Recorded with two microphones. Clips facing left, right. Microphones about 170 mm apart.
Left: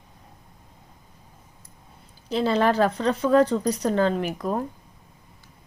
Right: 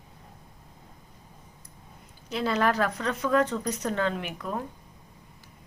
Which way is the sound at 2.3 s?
30° left (ahead or behind).